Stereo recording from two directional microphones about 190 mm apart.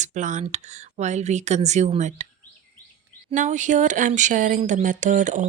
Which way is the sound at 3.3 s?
40° right (ahead or behind).